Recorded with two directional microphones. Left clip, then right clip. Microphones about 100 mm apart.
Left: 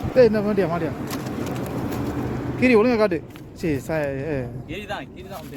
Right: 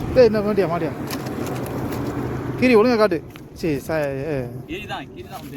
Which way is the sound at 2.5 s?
5° left (ahead or behind).